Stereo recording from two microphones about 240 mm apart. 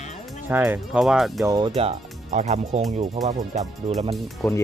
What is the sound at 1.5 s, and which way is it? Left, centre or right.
Speech, centre.